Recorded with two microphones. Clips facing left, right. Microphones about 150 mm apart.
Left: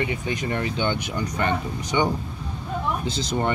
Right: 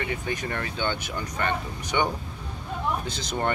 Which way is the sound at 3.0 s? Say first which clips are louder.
Left 3 dB; 10° left (ahead or behind).